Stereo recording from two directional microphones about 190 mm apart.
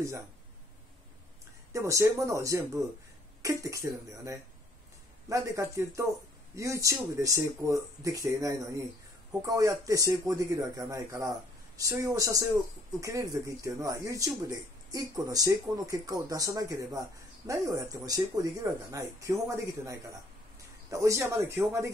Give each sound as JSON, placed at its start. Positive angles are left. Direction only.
{"t": 1.7, "sound": "speech", "side_deg": -15}